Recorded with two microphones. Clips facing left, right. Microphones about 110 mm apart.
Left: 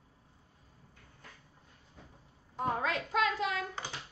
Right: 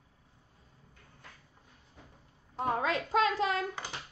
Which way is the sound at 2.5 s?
25° right (ahead or behind).